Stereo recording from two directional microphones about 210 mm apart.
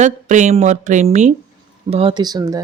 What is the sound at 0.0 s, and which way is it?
Speech, 35° right (ahead or behind).